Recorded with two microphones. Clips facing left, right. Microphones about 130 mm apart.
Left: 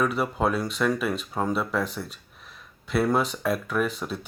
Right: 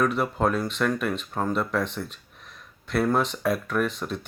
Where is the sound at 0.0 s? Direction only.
5° left (ahead or behind).